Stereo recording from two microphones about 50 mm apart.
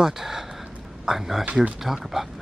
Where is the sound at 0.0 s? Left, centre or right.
Centre.